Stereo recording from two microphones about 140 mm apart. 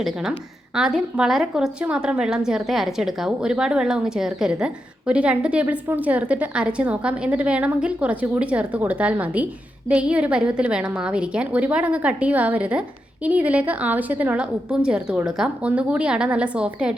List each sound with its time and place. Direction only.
0.0 s a woman's voice: 5° right (ahead or behind)